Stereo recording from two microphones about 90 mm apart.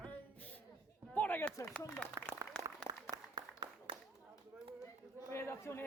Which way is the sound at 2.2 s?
30° right (ahead or behind).